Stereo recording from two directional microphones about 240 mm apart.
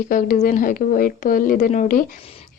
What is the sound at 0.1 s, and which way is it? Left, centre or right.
Speech, left.